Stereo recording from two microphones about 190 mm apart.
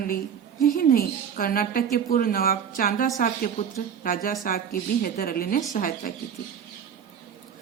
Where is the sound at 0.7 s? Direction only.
50° left (ahead or behind).